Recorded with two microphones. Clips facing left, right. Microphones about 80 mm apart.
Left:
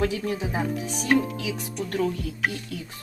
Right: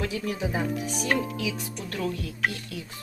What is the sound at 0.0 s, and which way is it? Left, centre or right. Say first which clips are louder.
Speech: left 4 dB; left.